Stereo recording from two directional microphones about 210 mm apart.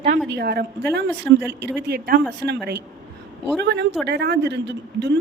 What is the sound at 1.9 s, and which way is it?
Speech, 50° right (ahead or behind).